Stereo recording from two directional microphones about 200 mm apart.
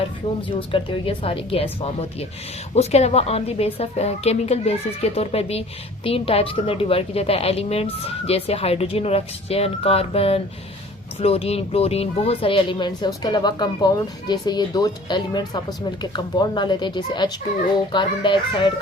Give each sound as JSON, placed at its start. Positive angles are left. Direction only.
{"t": 0.4, "sound": "speech", "side_deg": 25}